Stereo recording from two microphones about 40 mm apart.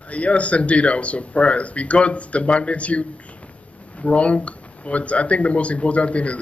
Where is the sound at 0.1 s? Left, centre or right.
Left.